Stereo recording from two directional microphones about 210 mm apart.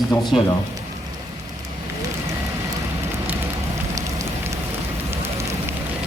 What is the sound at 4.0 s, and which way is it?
Rain on surface, 15° right (ahead or behind).